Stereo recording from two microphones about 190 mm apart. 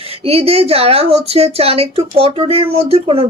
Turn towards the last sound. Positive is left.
turn(degrees=-30)  # may be behind; listen again after turning